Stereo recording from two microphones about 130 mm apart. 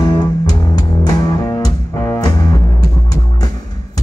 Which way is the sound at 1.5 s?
25° left (ahead or behind).